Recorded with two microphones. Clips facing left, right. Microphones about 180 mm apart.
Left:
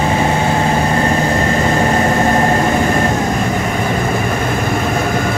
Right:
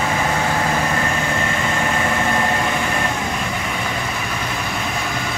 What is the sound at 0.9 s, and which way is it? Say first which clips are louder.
Vehicle: left 7 dB; 35° left (ahead or behind).